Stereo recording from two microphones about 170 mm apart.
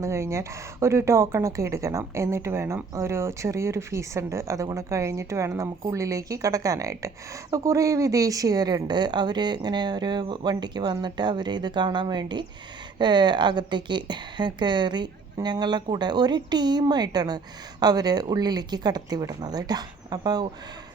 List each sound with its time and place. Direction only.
0.0 s a woman's voice: 15° right (ahead or behind)